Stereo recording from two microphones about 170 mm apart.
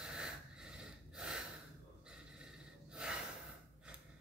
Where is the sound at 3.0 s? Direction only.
5° right (ahead or behind).